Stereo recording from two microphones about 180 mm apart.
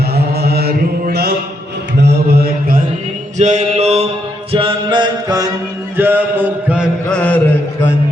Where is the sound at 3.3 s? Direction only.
40° right (ahead or behind); by 5.5 s 25° right (ahead or behind).